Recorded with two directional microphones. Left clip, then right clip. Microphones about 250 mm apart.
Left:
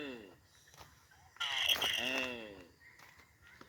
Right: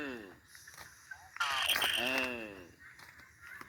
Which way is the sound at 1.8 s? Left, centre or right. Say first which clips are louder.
Right 3 dB; centre.